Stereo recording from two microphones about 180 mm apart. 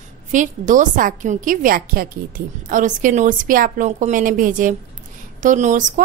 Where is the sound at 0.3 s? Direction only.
45° right (ahead or behind).